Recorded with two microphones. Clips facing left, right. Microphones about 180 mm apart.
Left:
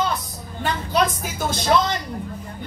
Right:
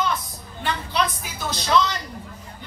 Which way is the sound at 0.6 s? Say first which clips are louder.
Left 3 dB; 45° left (ahead or behind).